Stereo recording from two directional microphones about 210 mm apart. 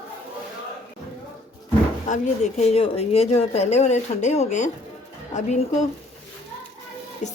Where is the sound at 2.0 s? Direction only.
35° left (ahead or behind).